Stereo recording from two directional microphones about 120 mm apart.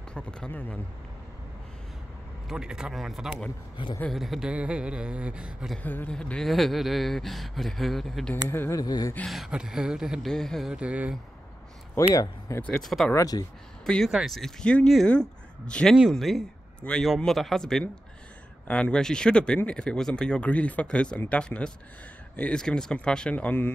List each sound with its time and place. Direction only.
0.1 s speech: 10° left (ahead or behind)
2.4 s speech: 5° right (ahead or behind)
3.7 s a man's voice: 40° left (ahead or behind)
4.1 s speech: centre (ahead or behind)
5.8 s speech: 15° left (ahead or behind)
8.5 s speech: 20° left (ahead or behind)
9.2 s speech: centre (ahead or behind)
10.7 s speech: 10° right (ahead or behind)
12.1 s speech: 30° left (ahead or behind)
12.6 s speech: 5° left (ahead or behind)
13.1 s speech: 30° left (ahead or behind)
13.8 s speech: 5° left (ahead or behind)